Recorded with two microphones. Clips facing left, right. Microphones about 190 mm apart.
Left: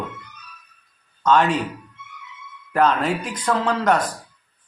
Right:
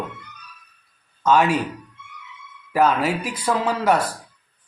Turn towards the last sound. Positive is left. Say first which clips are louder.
# even
turn(degrees=-10)  # may be behind; listen again after turning